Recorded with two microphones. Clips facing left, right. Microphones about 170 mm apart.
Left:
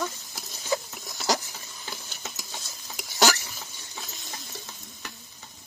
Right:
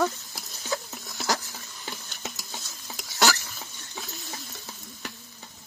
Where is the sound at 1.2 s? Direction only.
20° left (ahead or behind).